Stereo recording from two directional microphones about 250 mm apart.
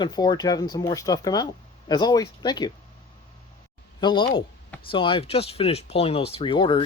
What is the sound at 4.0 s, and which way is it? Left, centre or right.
Speech, centre.